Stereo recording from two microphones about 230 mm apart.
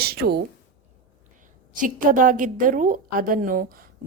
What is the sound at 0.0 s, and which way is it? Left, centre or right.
Speech, right.